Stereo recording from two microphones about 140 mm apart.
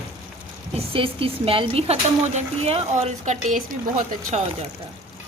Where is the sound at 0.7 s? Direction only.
40° right (ahead or behind).